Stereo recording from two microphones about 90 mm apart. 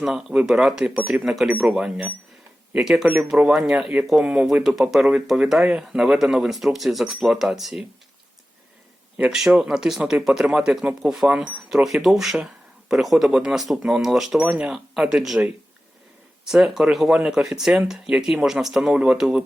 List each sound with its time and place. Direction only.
0.0 s speech: 5° right (ahead or behind)
9.1 s speech: 15° right (ahead or behind)
16.5 s speech: 5° right (ahead or behind)